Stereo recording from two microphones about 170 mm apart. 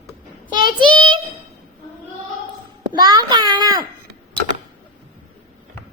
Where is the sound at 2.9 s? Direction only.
25° right (ahead or behind).